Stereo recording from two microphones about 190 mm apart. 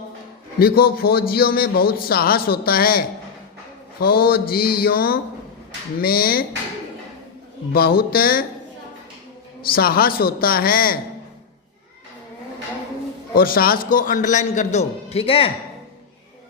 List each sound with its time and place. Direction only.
0.6 s a man's voice: 50° left (ahead or behind)
7.7 s a man's voice: 50° left (ahead or behind)
9.7 s a man's voice: 50° left (ahead or behind)
13.3 s a man's voice: 50° left (ahead or behind); by 15.5 s 30° left (ahead or behind)